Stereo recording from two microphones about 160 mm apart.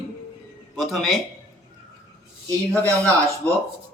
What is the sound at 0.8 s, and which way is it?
Speech, centre (ahead or behind).